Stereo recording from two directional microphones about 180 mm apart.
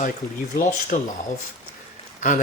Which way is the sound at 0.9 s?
50° left (ahead or behind).